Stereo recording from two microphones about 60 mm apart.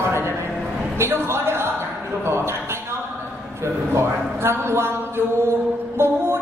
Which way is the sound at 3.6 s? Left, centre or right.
Right.